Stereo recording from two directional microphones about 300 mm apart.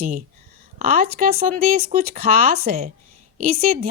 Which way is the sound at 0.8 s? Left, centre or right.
Right.